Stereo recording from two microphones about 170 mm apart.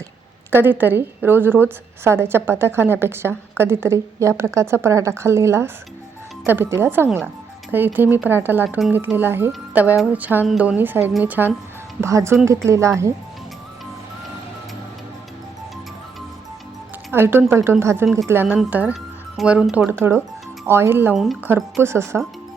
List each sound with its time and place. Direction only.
0.5 s a woman's voice: 10° right (ahead or behind)
8.6 s speech: centre (ahead or behind)
8.9 s a woman's voice: 10° right (ahead or behind)
17.1 s a woman's voice: 15° right (ahead or behind)